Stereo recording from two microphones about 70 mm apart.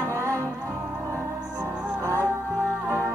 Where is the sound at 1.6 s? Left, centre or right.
Right.